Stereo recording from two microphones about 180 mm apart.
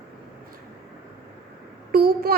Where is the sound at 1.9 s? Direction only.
55° right (ahead or behind).